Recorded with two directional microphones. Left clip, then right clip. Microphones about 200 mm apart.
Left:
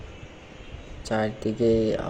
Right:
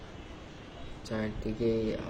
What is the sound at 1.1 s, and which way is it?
Speech, 10° left (ahead or behind).